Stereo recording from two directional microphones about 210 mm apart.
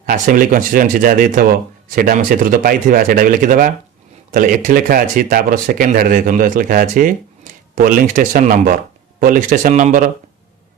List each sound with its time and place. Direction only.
0.0 s speech: 40° right (ahead or behind)